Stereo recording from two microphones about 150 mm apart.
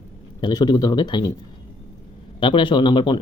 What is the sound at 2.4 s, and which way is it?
Speech, 30° left (ahead or behind).